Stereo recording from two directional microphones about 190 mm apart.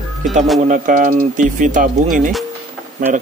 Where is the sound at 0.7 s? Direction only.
45° right (ahead or behind).